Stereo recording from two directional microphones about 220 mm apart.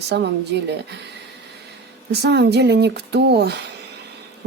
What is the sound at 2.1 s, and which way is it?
Speech, 50° right (ahead or behind).